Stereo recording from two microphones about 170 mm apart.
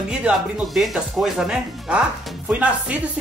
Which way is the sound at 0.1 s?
5° right (ahead or behind).